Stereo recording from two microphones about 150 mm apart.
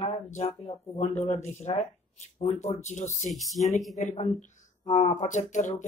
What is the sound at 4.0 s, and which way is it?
Speech, 50° left (ahead or behind).